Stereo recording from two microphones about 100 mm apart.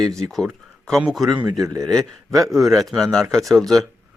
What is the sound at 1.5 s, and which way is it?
Speech, 35° right (ahead or behind).